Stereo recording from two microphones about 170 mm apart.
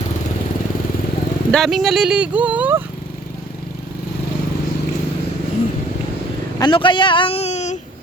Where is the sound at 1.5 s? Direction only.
5° left (ahead or behind).